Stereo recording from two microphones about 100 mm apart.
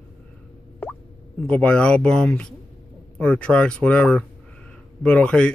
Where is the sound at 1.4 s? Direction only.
10° left (ahead or behind).